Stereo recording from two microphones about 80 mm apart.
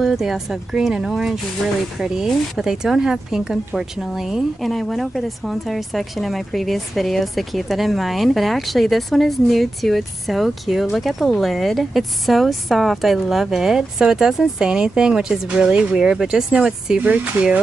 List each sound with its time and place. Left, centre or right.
0.0 s speech: centre